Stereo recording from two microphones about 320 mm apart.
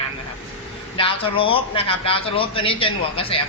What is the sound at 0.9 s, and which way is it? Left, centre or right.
A man's voice, centre.